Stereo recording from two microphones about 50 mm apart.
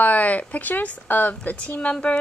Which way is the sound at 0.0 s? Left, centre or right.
Left.